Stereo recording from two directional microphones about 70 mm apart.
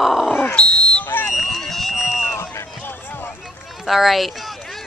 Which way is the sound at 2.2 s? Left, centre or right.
Left.